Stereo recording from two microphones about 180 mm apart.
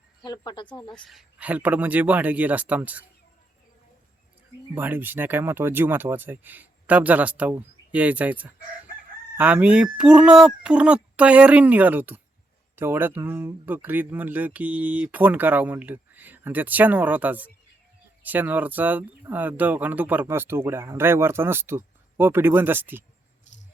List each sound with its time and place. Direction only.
0.3 s speech: 25° left (ahead or behind)
0.9 s speech: centre (ahead or behind)
4.7 s speech: 10° right (ahead or behind)
23.5 s rattle: 40° left (ahead or behind)